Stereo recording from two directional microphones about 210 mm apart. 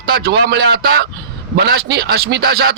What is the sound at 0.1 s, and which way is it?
A man's voice, 50° right (ahead or behind).